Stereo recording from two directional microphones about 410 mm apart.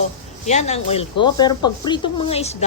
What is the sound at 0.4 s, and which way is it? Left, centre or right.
Speech, centre.